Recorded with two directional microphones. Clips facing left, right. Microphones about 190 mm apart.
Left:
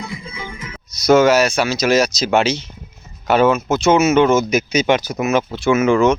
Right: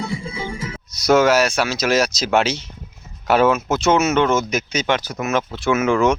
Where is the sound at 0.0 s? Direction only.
30° right (ahead or behind).